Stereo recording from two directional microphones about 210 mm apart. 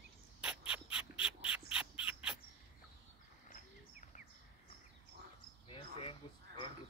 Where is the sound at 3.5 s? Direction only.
35° left (ahead or behind).